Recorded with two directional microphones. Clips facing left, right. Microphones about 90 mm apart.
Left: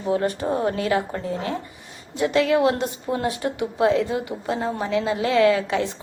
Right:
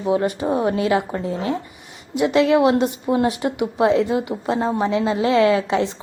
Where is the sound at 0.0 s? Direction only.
15° right (ahead or behind).